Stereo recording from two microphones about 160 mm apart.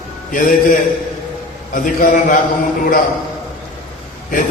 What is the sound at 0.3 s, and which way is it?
Speech, 60° left (ahead or behind).